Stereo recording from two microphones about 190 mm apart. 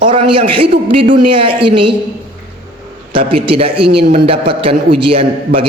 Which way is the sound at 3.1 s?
30° right (ahead or behind).